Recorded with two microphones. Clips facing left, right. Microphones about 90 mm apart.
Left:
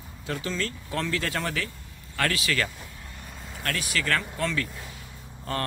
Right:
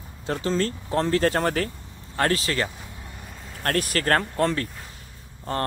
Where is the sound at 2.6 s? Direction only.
20° right (ahead or behind).